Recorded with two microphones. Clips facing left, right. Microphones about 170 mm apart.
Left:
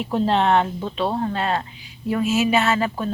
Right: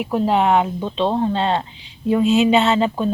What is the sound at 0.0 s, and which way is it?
Speech, 10° right (ahead or behind).